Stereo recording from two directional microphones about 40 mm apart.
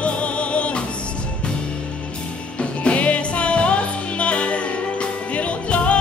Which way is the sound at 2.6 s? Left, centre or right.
Left.